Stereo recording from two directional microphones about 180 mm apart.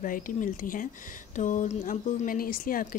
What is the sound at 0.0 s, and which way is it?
Speech, 50° left (ahead or behind).